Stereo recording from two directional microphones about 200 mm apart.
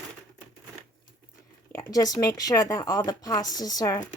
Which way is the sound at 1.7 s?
15° left (ahead or behind).